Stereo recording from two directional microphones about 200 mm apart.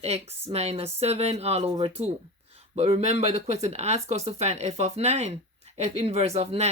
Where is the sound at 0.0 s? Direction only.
30° right (ahead or behind).